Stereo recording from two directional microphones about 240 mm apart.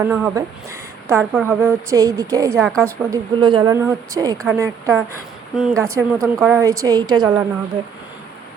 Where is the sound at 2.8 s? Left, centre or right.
Centre.